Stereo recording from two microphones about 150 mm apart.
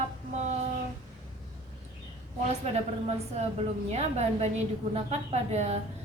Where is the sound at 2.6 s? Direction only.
45° right (ahead or behind).